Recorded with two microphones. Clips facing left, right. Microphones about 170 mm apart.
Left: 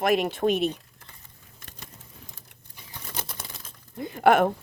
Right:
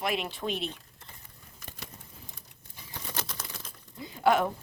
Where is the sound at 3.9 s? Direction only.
60° left (ahead or behind).